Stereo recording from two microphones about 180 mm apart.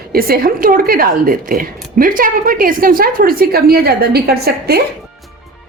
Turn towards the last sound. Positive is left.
turn(degrees=-60)  # may be behind; listen again after turning